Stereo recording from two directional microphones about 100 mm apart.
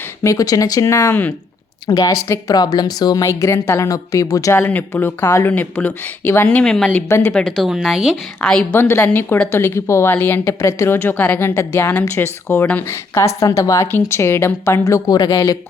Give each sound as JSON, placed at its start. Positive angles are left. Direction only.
{"t": 0.2, "sound": "a woman's voice", "side_deg": 35}
{"t": 4.6, "sound": "a woman's voice", "side_deg": 20}
{"t": 7.1, "sound": "a woman's voice", "side_deg": 25}
{"t": 7.3, "sound": "speech", "side_deg": 5}
{"t": 8.4, "sound": "a woman's voice", "side_deg": 10}
{"t": 8.8, "sound": "a woman's voice", "side_deg": 25}
{"t": 12.9, "sound": "a woman's voice", "side_deg": 30}